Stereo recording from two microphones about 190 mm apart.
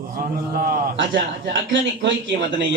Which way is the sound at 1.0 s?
75° right (ahead or behind).